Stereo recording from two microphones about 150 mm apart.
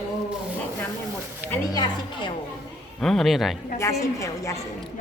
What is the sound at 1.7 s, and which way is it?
Music, 30° left (ahead or behind).